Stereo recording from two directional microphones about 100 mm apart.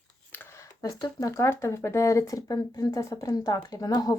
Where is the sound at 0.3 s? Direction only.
25° left (ahead or behind); by 1.1 s 40° left (ahead or behind).